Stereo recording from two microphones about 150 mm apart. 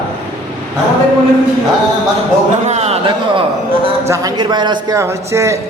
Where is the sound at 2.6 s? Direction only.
45° right (ahead or behind).